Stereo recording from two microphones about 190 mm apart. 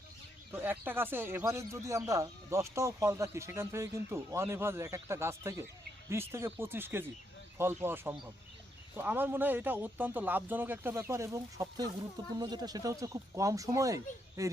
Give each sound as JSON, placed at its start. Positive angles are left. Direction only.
{"t": 0.5, "sound": "speech", "side_deg": -10}